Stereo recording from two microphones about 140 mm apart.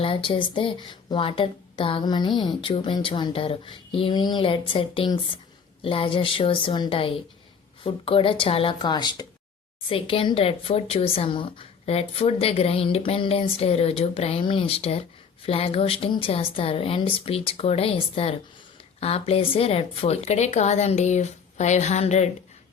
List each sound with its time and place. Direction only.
0.0 s a woman's voice: 40° left (ahead or behind)